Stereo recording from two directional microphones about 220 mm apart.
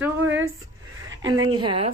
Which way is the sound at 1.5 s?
25° right (ahead or behind).